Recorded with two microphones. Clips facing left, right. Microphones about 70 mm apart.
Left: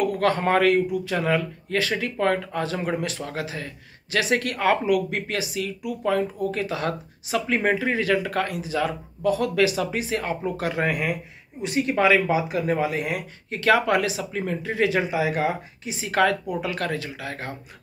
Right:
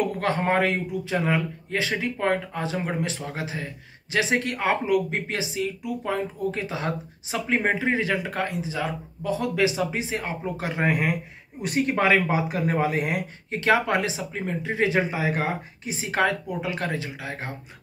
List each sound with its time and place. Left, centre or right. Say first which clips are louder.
0.0 s speech: left 3 dB; right
11.6 s speech: left 2 dB; right
13.5 s speech: left 2 dB; right
16.1 s speech: left 3 dB; right